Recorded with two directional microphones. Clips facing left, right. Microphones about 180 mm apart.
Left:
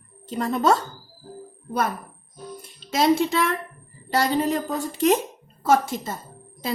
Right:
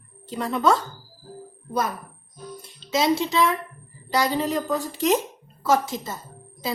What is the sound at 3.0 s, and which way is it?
Speech, 50° left (ahead or behind).